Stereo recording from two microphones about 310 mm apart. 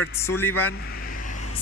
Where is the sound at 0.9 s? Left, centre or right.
Left.